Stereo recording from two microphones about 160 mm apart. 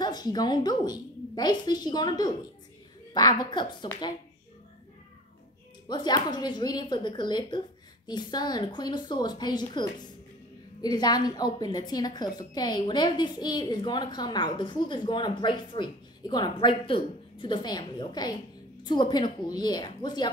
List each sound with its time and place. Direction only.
0.0 s a woman's voice: 25° left (ahead or behind)
5.9 s a woman's voice: 25° left (ahead or behind)